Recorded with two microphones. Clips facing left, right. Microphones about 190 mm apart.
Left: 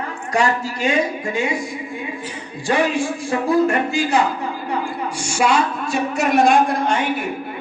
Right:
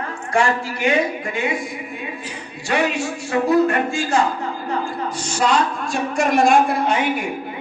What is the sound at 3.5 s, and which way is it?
A man's voice, 25° left (ahead or behind).